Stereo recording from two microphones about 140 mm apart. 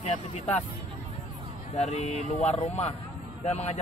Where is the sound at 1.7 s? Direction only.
55° left (ahead or behind).